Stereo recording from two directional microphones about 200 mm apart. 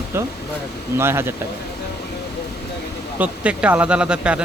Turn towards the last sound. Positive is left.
turn(degrees=-5)  # may be behind; listen again after turning